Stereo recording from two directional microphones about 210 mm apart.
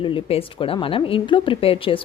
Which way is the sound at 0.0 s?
25° left (ahead or behind).